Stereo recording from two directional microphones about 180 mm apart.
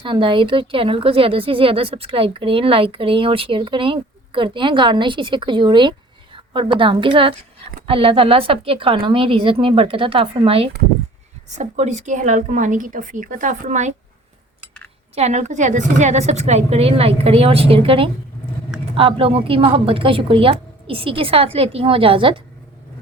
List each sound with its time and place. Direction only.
0.0 s a woman's voice: 25° right (ahead or behind)
15.1 s a woman's voice: 40° right (ahead or behind)